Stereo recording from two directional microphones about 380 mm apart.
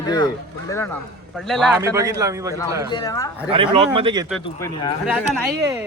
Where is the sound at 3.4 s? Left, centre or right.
Centre.